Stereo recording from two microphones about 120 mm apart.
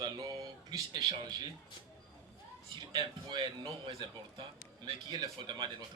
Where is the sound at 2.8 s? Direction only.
35° right (ahead or behind).